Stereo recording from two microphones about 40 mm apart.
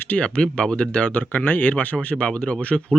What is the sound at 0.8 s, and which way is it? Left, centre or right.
Speech, left.